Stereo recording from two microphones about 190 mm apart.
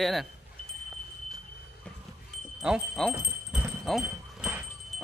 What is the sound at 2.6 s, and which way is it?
Wind chime, centre (ahead or behind).